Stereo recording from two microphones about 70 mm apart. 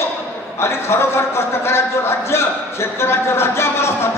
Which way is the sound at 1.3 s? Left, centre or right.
Left.